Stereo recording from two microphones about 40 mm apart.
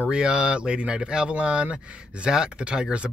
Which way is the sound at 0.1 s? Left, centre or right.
Right.